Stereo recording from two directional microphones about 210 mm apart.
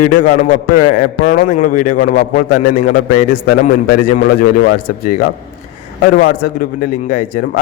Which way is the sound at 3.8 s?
45° left (ahead or behind).